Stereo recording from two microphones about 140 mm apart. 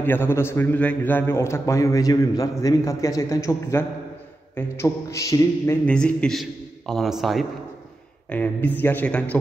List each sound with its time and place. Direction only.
0.0 s a man's voice: 15° left (ahead or behind)
5.9 s a man's voice: 5° left (ahead or behind)
8.3 s speech: 10° left (ahead or behind)